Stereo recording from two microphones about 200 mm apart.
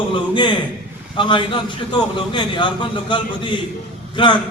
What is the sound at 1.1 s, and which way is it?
A man's voice, 25° left (ahead or behind).